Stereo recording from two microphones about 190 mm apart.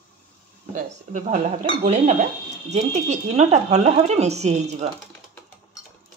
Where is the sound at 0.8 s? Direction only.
40° right (ahead or behind).